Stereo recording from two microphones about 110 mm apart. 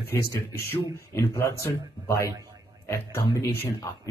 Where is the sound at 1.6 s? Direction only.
25° left (ahead or behind).